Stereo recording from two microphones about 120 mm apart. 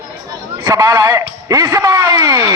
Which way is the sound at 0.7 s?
30° right (ahead or behind).